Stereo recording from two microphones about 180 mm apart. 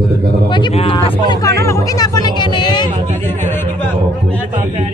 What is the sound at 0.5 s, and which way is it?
Speech, 25° left (ahead or behind).